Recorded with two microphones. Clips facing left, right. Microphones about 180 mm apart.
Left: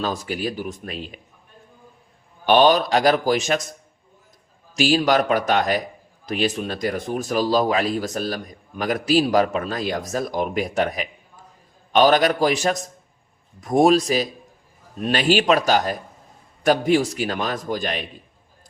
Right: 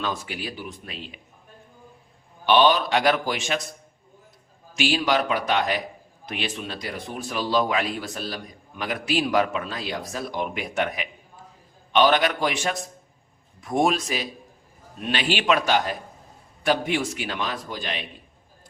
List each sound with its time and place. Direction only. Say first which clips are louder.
0.0 s a man's voice: left 5 dB; 40° left (ahead or behind)
2.5 s a man's voice: left 3 dB; 45° left (ahead or behind)